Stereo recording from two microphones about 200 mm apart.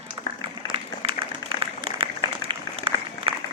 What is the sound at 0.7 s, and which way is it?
Applause, 25° right (ahead or behind).